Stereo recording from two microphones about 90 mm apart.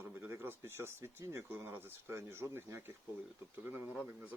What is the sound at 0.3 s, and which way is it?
Speech, 25° right (ahead or behind).